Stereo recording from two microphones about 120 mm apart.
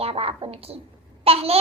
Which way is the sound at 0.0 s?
55° right (ahead or behind).